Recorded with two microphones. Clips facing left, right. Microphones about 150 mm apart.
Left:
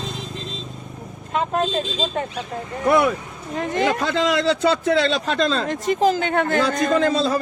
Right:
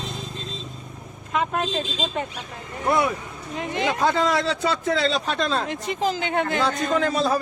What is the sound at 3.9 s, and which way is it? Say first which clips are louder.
A man's voice: left 1 dB; 90° left.